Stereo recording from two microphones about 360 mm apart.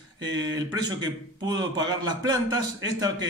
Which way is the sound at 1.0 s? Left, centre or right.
Centre.